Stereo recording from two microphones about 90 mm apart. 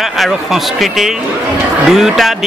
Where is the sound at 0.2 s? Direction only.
Centre (ahead or behind).